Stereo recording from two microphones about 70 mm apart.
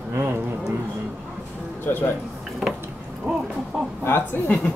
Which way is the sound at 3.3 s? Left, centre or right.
Right.